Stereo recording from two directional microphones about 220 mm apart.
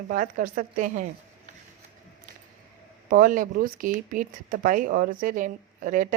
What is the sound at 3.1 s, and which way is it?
Speech, 40° right (ahead or behind).